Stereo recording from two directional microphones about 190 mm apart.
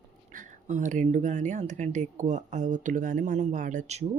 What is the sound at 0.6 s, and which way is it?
Speech, 40° right (ahead or behind).